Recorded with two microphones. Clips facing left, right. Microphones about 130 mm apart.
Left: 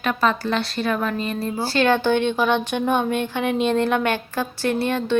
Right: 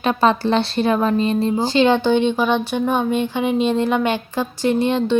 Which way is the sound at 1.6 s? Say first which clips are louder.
Right 1 dB; 15° right (ahead or behind).